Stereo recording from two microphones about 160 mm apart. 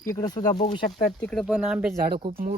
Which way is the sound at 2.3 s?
70° right (ahead or behind).